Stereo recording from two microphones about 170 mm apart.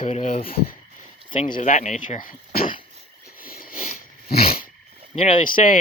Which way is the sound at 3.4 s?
60° left (ahead or behind).